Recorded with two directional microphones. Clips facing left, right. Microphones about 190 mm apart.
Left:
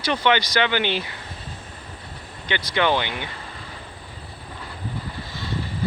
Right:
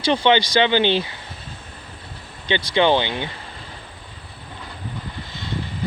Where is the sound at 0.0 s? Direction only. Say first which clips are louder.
Right 4 dB; 30° right (ahead or behind).